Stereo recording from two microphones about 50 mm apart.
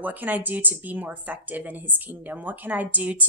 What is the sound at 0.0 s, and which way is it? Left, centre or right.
A woman's voice, right.